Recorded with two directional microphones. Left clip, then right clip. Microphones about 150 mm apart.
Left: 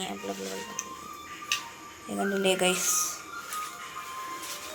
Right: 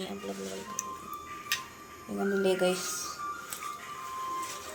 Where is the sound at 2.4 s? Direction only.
Centre (ahead or behind).